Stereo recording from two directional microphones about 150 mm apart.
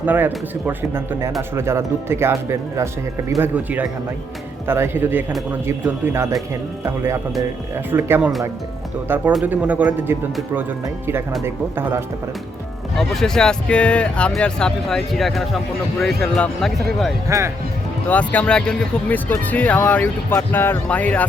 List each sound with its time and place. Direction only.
0.0 s speech: 10° right (ahead or behind)
13.0 s speech: 5° left (ahead or behind)
17.2 s speech: 20° right (ahead or behind)
18.1 s speech: 10° left (ahead or behind)